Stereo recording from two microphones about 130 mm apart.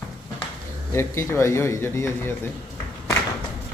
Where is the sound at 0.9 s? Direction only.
20° left (ahead or behind).